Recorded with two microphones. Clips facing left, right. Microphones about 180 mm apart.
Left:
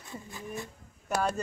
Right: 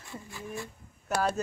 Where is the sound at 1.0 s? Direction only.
5° right (ahead or behind).